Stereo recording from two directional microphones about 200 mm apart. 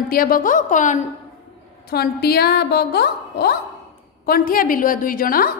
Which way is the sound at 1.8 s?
50° left (ahead or behind).